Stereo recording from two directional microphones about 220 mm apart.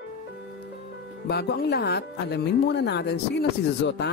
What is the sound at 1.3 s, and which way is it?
A woman's voice, 45° left (ahead or behind).